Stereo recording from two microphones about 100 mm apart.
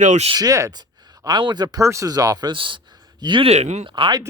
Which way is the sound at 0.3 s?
35° right (ahead or behind).